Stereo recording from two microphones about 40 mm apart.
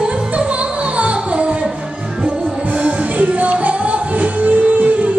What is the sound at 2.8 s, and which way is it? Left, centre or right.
Music, right.